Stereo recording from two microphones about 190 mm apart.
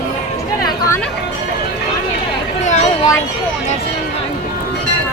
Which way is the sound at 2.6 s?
40° left (ahead or behind).